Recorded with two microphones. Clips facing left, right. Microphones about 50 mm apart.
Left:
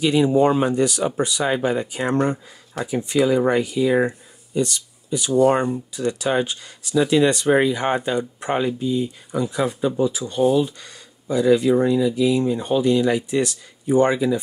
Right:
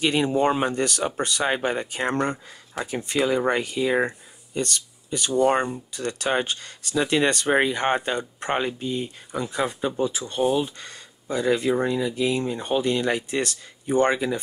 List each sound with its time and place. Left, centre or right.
0.0 s speech: right
2.8 s speech: centre
3.1 s speech: right